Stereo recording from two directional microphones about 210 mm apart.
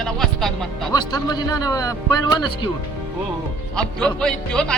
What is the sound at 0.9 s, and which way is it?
A man's voice, 20° left (ahead or behind).